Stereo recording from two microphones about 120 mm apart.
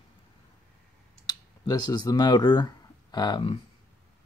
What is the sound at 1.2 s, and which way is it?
Speech, 35° left (ahead or behind).